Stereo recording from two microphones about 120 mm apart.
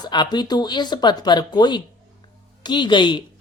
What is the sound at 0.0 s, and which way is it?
Speech, 35° left (ahead or behind).